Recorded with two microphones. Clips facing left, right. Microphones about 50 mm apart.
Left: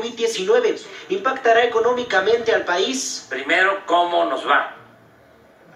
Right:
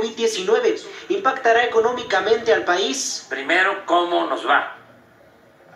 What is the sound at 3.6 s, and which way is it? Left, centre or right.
Speech, centre.